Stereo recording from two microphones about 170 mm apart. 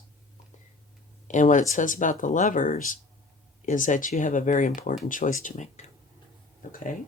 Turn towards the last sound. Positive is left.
turn(degrees=50)  # may be behind; listen again after turning